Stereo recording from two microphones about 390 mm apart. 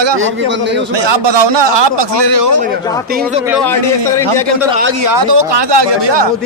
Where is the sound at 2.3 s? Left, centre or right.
Right.